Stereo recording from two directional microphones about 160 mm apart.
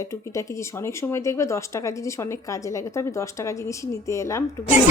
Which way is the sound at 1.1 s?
20° left (ahead or behind).